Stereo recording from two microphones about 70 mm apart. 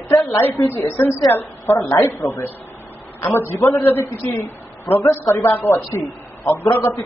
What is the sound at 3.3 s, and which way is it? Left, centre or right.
A woman's voice, left.